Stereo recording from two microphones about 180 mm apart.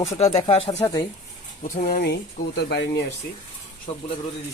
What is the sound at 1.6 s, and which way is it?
Speech, 45° left (ahead or behind).